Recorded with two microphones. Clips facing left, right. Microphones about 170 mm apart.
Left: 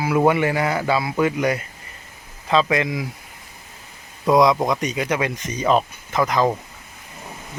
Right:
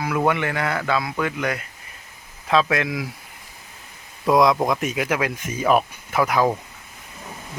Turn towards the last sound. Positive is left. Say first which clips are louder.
# even
turn(degrees=-10)  # may be behind; listen again after turning